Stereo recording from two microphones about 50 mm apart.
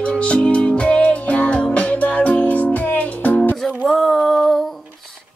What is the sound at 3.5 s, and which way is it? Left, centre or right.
Music, centre.